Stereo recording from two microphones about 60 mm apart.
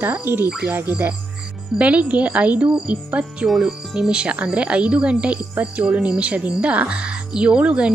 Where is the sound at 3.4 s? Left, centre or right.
Centre.